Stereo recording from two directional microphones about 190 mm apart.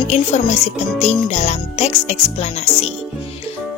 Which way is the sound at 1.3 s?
35° left (ahead or behind).